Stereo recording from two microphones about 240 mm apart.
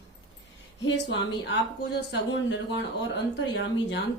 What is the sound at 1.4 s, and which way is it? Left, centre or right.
Music, left.